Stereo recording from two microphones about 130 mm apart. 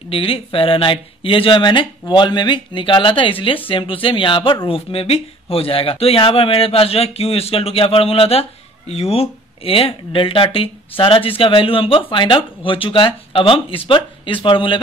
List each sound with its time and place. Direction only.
0.1 s speech: 45° left (ahead or behind)